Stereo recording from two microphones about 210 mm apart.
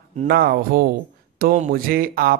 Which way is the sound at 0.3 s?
45° right (ahead or behind).